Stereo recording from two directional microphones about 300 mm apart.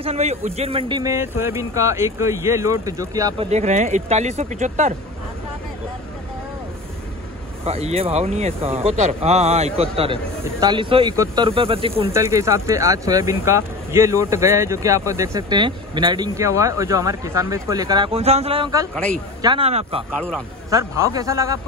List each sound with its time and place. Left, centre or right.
0.0 s speech: right
7.6 s speech: centre